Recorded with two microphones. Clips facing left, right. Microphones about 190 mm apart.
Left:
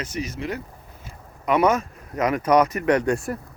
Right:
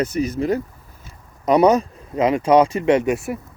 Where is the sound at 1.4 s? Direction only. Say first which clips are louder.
Right 5 dB; 35° right (ahead or behind).